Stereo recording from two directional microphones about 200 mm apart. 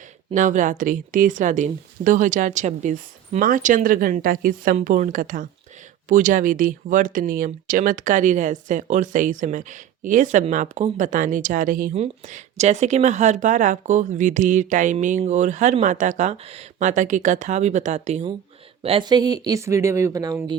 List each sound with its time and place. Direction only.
0.3 s speech: 40° right (ahead or behind); by 20.6 s 15° right (ahead or behind)